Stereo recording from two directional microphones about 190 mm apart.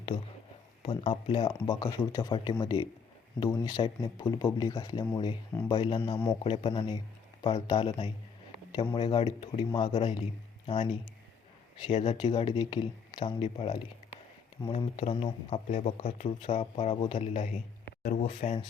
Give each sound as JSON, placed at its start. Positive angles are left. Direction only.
{"t": 0.8, "sound": "speech", "side_deg": 25}
{"t": 9.9, "sound": "speech", "side_deg": 35}
{"t": 11.9, "sound": "speech", "side_deg": 35}
{"t": 12.1, "sound": "speech", "side_deg": 25}
{"t": 17.8, "sound": "a sound", "side_deg": 50}
{"t": 18.3, "sound": "speech", "side_deg": 30}